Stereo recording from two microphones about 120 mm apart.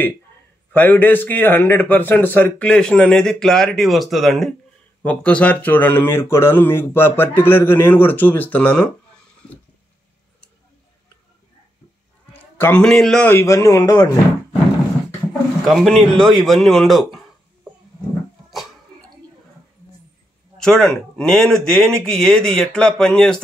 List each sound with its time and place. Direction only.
0.7 s speech: 15° left (ahead or behind)
5.0 s speech: 15° left (ahead or behind)
12.5 s a man's voice: 15° left (ahead or behind)
12.8 s speech: 5° left (ahead or behind)
13.3 s speech: 20° left (ahead or behind)
15.6 s speech: centre (ahead or behind)
20.5 s speech: 5° left (ahead or behind)